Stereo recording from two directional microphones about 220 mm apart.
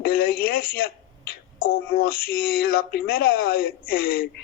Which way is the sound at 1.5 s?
45° left (ahead or behind).